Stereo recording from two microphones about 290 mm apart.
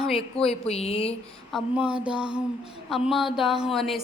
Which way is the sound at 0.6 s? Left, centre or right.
Left.